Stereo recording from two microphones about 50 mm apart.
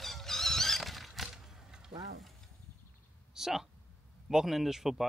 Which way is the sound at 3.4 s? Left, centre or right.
Centre.